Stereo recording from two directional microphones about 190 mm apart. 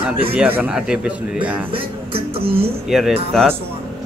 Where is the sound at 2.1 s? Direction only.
30° right (ahead or behind).